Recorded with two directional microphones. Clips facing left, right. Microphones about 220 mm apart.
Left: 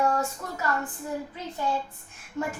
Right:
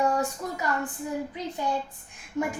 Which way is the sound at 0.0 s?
15° right (ahead or behind).